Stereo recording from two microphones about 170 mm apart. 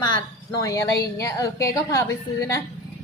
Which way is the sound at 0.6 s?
20° left (ahead or behind).